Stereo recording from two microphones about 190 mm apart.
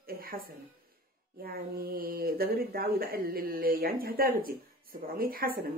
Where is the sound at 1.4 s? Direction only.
50° right (ahead or behind).